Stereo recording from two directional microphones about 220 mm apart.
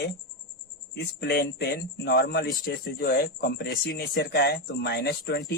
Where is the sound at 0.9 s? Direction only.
45° left (ahead or behind).